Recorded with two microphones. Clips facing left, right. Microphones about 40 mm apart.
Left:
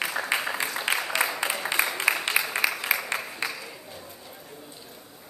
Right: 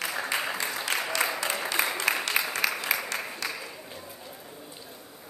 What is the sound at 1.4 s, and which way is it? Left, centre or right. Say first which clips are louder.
Applause: left 2 dB; centre.